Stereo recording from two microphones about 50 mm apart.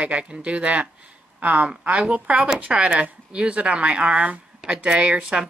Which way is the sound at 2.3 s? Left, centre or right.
Centre.